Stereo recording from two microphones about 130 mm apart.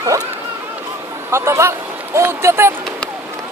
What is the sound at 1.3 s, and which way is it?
Speech, 20° right (ahead or behind).